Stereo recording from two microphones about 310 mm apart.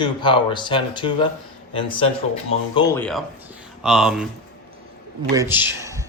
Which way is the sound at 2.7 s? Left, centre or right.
Centre.